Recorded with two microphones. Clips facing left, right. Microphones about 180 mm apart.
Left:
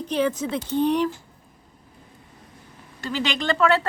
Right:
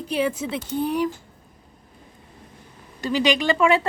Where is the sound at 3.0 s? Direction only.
15° right (ahead or behind).